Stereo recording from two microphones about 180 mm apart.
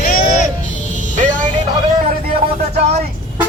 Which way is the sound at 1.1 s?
45° right (ahead or behind).